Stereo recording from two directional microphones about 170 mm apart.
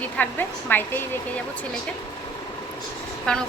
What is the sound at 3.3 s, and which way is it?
Speech, 5° left (ahead or behind).